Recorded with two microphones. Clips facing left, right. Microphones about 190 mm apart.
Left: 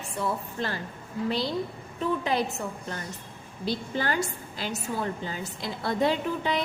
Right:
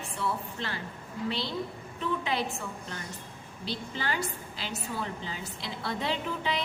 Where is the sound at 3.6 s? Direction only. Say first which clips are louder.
Left 6 dB; 45° left (ahead or behind).